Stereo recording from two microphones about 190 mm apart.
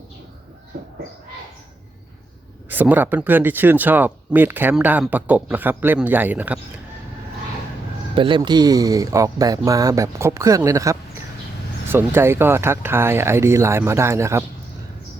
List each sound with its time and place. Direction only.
2.6 s speech: 10° right (ahead or behind)
8.1 s speech: 25° right (ahead or behind)